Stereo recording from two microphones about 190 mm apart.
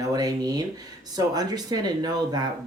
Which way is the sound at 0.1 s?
20° right (ahead or behind).